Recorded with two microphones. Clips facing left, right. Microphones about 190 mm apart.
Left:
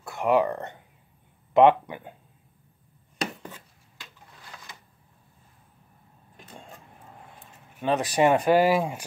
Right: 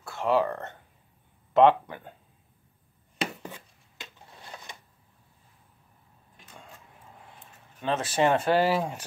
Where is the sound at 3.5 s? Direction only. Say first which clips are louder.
Right 2 dB; 25° right (ahead or behind).